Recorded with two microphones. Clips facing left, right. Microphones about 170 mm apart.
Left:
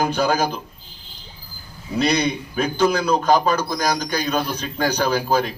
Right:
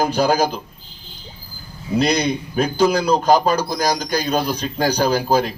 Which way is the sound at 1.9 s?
35° right (ahead or behind).